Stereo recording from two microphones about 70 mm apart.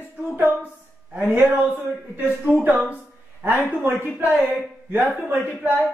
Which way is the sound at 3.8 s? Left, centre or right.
Right.